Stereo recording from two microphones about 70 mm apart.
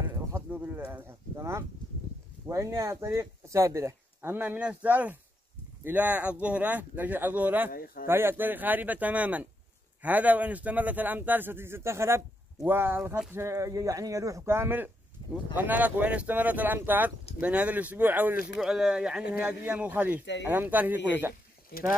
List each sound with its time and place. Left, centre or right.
0.5 s a sound: right
1.3 s speech: right
4.4 s speech: right
14.5 s speech: right
18.6 s speech: centre
19.4 s speech: right